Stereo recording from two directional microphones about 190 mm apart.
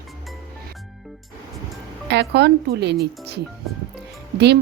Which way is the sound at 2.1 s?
65° right (ahead or behind).